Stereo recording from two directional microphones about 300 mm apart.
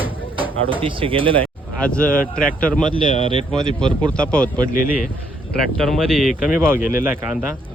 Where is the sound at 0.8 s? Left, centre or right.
Centre.